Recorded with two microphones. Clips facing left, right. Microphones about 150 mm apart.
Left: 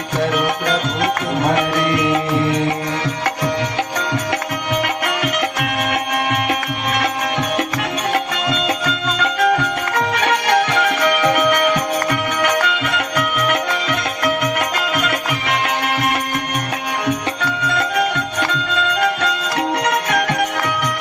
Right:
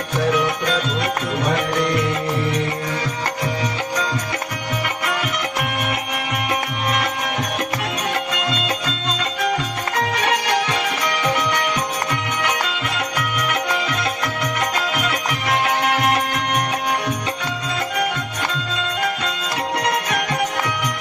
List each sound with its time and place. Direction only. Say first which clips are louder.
0.3 s music: right 1 dB; 60° left (ahead or behind)
5.0 s music: left 4 dB; 65° left (ahead or behind)
8.6 s music: left 4 dB; 65° left (ahead or behind)
17.1 s music: left 4 dB; 65° left (ahead or behind)